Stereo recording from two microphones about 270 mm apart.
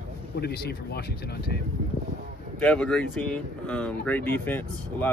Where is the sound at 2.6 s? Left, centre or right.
Centre.